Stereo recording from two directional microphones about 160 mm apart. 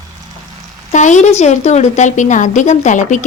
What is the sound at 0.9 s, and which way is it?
A woman's voice, 50° left (ahead or behind).